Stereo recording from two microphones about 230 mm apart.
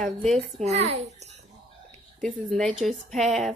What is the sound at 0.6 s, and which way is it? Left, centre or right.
Speech, right.